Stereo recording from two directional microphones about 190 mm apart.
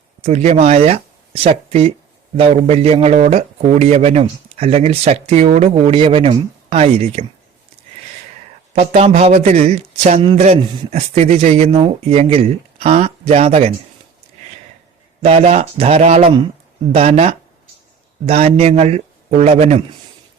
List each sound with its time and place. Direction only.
0.2 s a man's voice: 35° right (ahead or behind)
9.0 s a man's voice: 35° right (ahead or behind)
15.2 s a man's voice: 30° right (ahead or behind)